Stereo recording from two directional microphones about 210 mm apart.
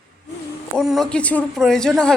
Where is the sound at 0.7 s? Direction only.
Centre (ahead or behind).